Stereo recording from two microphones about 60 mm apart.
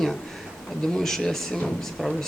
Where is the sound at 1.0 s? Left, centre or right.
Centre.